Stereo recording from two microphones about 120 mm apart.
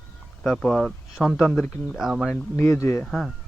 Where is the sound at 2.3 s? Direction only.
20° left (ahead or behind).